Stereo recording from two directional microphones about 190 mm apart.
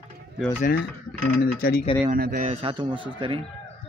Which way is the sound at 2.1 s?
50° right (ahead or behind).